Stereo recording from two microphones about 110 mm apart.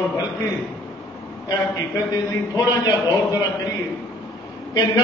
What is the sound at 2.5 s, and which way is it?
Speech, 35° left (ahead or behind).